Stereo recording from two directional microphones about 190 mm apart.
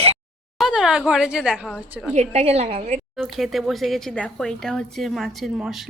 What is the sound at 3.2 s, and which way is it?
Speech, centre (ahead or behind).